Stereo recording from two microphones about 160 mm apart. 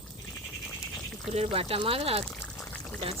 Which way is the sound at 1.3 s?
35° right (ahead or behind).